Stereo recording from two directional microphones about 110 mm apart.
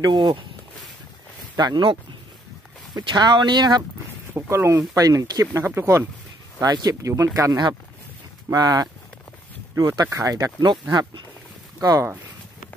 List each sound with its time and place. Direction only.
0.0 s speech: 45° right (ahead or behind)
1.6 s speech: 45° right (ahead or behind)
4.3 s speech: 20° right (ahead or behind)
5.6 s speech: 20° right (ahead or behind)
6.6 s speech: 35° right (ahead or behind)
8.5 s speech: 40° right (ahead or behind)